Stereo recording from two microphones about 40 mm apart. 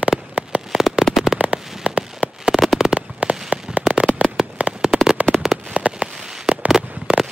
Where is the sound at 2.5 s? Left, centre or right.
Centre.